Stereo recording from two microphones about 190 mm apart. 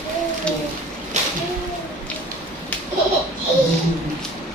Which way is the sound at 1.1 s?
40° right (ahead or behind).